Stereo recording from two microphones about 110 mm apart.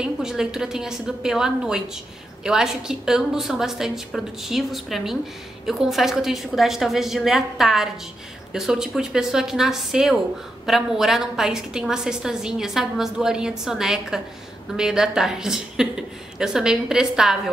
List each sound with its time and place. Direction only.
0.0 s a woman's voice: 5° right (ahead or behind)